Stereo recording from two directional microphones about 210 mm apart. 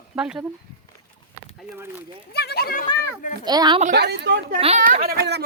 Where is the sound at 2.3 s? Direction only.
50° left (ahead or behind).